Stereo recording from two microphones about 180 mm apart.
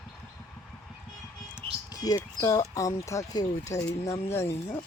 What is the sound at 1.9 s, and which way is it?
Speech, 20° left (ahead or behind).